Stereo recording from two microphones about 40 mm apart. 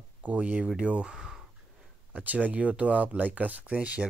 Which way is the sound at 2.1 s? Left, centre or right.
Right.